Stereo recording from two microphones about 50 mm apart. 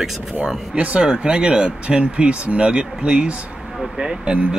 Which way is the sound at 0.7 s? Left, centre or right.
Right.